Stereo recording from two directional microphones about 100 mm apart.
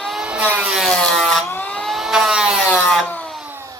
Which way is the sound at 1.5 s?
20° left (ahead or behind).